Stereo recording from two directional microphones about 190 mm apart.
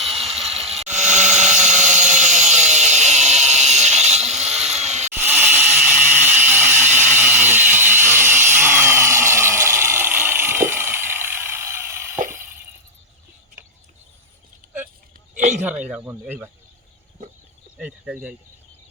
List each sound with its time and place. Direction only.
0.0 s a sound: centre (ahead or behind)
0.9 s tools: 40° right (ahead or behind)
4.5 s chainsaw: centre (ahead or behind)
4.8 s chainsaw: 35° right (ahead or behind)
5.1 s tools: 10° right (ahead or behind)
15.4 s a sound: 40° right (ahead or behind)
15.6 s speech: 5° right (ahead or behind)
17.7 s speech: 5° right (ahead or behind)